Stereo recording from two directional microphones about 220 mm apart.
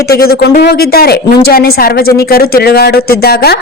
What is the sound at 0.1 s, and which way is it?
Speech, 45° left (ahead or behind).